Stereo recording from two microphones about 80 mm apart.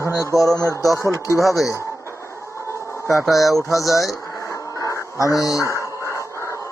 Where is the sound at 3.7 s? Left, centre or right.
Left.